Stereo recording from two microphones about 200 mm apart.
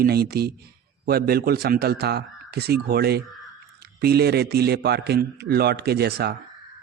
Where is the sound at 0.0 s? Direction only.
50° right (ahead or behind).